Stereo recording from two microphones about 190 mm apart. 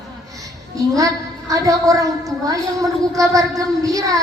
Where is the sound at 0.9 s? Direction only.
15° right (ahead or behind).